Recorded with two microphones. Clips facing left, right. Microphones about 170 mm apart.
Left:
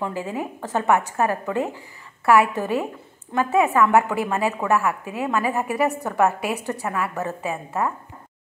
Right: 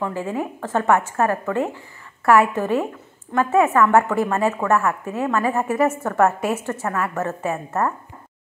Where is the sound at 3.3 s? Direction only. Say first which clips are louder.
Right 2 dB; 15° left (ahead or behind).